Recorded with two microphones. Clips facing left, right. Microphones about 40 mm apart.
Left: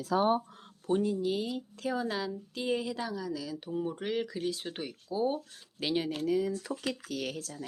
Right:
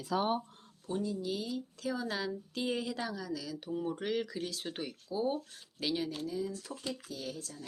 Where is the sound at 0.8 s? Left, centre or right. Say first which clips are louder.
Left 7 dB; left.